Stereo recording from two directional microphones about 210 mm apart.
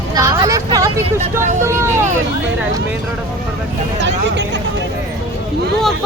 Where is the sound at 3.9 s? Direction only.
55° right (ahead or behind).